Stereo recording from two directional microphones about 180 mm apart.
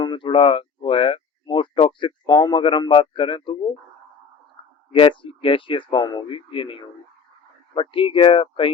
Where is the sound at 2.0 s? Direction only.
25° left (ahead or behind).